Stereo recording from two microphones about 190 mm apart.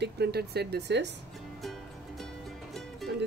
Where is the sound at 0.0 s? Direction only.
60° right (ahead or behind).